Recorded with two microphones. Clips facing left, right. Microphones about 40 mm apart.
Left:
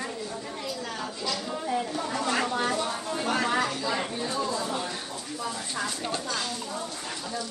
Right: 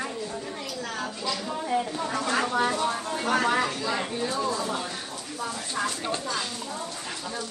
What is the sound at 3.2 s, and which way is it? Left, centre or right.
Speech, right.